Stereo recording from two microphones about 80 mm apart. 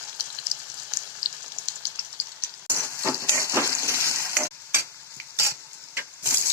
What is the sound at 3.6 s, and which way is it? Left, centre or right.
Frying, left.